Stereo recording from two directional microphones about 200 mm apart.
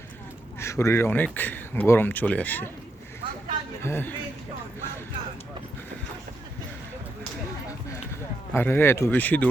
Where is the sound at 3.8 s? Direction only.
10° left (ahead or behind).